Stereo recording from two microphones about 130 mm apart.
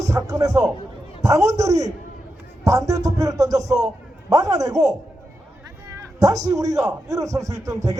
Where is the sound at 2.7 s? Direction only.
25° right (ahead or behind).